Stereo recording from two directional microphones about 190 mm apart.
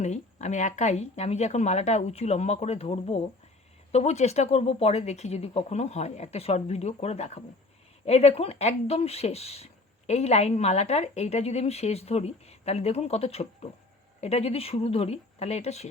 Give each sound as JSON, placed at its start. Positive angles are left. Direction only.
{"t": 0.0, "sound": "a woman's voice", "side_deg": 35}